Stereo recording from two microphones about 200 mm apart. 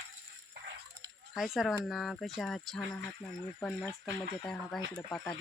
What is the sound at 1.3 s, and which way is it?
Speech, centre (ahead or behind).